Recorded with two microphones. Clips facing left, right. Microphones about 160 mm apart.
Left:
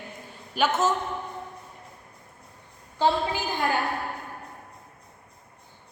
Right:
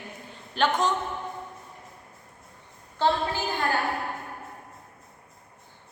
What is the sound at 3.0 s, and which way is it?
Speech, 15° left (ahead or behind).